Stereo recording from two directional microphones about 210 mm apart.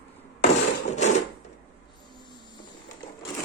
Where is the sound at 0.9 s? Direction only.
35° left (ahead or behind).